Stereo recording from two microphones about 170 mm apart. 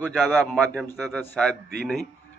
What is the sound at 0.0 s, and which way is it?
A man's voice, centre (ahead or behind).